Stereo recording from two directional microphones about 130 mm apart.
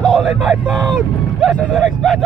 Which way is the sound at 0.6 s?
5° left (ahead or behind).